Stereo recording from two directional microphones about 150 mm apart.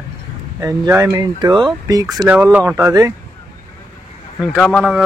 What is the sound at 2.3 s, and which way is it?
Speech, 10° right (ahead or behind).